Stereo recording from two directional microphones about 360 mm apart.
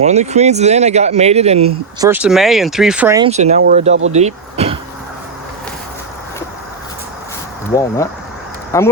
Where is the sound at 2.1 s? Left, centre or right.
Centre.